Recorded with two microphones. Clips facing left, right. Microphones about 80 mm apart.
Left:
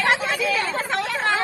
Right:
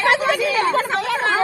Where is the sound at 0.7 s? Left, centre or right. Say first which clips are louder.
Right 5 dB; right.